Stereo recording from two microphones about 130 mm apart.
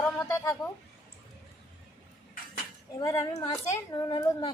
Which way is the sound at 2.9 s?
25° left (ahead or behind).